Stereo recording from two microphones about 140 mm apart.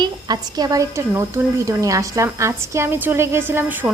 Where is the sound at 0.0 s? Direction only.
30° right (ahead or behind).